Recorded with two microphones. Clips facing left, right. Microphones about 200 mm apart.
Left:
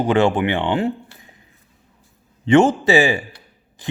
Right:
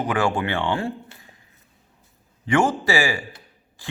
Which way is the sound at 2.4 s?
25° left (ahead or behind).